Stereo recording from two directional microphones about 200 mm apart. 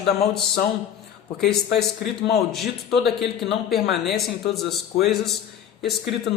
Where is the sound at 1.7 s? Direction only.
55° left (ahead or behind).